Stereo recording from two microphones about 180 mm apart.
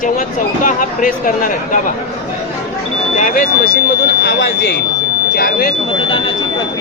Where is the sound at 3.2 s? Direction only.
50° left (ahead or behind).